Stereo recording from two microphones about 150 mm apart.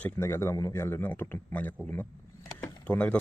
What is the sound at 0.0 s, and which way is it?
A man's voice, 15° left (ahead or behind).